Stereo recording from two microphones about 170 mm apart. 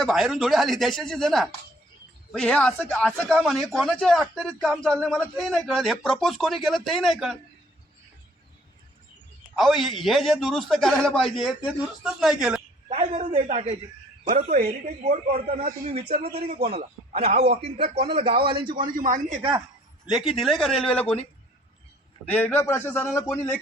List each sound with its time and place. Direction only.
0.0 s a man's voice: centre (ahead or behind)
9.6 s a man's voice: centre (ahead or behind)
12.9 s a sound: 35° right (ahead or behind)
14.4 s speech: 60° right (ahead or behind)
15.4 s a man's voice: 40° right (ahead or behind)
18.9 s a man's voice: 50° right (ahead or behind)
20.1 s a man's voice: 5° right (ahead or behind)
22.3 s a man's voice: 10° left (ahead or behind)